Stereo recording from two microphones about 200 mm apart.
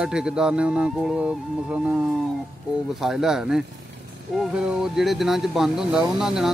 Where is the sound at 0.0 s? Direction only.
5° right (ahead or behind).